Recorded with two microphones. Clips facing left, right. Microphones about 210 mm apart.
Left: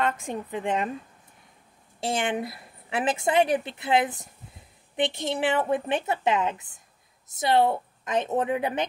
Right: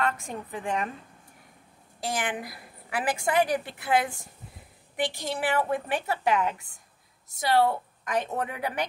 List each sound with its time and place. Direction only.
0.0 s a woman's voice: 20° left (ahead or behind)
2.0 s a woman's voice: 25° left (ahead or behind)